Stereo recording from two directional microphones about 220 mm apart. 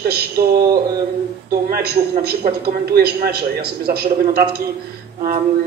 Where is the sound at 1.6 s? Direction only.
45° right (ahead or behind).